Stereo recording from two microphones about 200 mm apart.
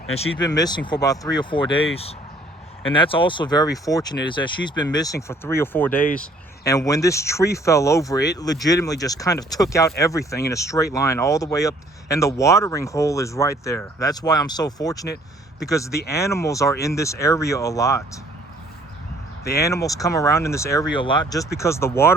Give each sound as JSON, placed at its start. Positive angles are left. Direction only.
{"t": 0.5, "sound": "speech", "side_deg": 20}
{"t": 19.5, "sound": "speech", "side_deg": 15}